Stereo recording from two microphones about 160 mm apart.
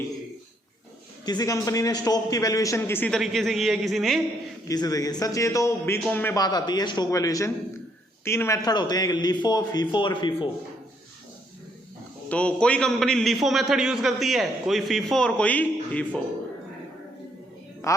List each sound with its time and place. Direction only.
1.2 s a man's voice: 25° left (ahead or behind)
3.2 s a man's voice: centre (ahead or behind)
4.7 s a man's voice: 25° left (ahead or behind)
6.3 s a man's voice: 25° left (ahead or behind)
12.3 s a man's voice: 5° left (ahead or behind)
17.8 s speech: 20° left (ahead or behind)